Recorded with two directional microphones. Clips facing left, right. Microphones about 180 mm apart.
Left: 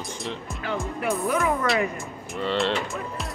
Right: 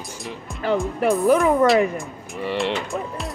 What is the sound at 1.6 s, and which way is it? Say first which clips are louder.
Speech: right 7 dB; centre (ahead or behind).